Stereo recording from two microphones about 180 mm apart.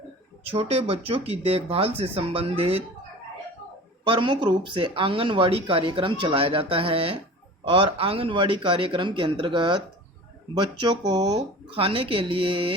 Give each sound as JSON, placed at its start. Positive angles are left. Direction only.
{"t": 0.4, "sound": "speech", "side_deg": -30}
{"t": 4.0, "sound": "speech", "side_deg": -30}